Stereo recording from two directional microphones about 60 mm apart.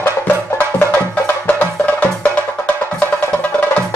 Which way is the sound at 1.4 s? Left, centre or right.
Left.